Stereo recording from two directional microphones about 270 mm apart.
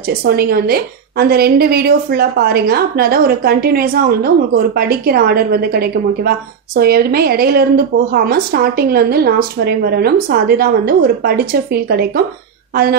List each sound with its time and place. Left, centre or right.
0.2 s a woman's voice: right